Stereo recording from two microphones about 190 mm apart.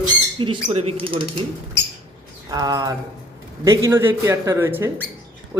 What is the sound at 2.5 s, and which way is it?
Speech, 20° right (ahead or behind).